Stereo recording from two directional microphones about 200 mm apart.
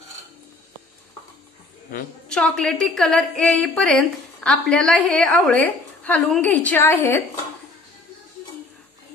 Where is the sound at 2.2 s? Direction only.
5° left (ahead or behind).